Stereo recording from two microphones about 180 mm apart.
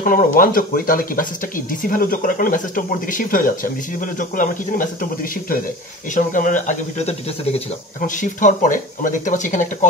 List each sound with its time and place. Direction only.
0.0 s speech: 50° left (ahead or behind)
6.1 s speech: 45° left (ahead or behind)